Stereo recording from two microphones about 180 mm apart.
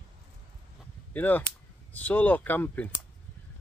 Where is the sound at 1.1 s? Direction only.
10° left (ahead or behind).